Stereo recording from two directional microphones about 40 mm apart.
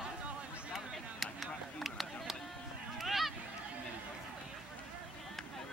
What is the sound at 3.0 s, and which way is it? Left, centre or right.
Honk, centre.